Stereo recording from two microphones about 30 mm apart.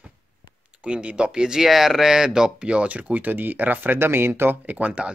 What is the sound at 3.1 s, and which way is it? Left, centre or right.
Speech, right.